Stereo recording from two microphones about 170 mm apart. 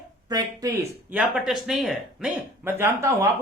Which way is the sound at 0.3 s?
20° right (ahead or behind).